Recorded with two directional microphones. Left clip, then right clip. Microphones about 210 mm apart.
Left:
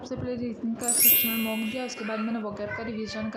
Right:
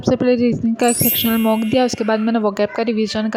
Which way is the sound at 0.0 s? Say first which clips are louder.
Right 17 dB; 40° right (ahead or behind).